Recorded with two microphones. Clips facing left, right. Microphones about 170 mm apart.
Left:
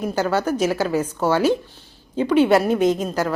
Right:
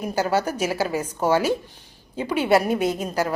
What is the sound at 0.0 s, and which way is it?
A woman's voice, 10° right (ahead or behind).